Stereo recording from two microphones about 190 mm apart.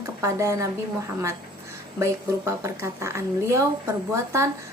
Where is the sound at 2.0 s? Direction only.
15° right (ahead or behind).